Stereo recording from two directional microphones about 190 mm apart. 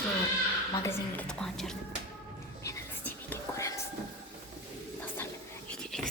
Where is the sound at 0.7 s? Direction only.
15° left (ahead or behind).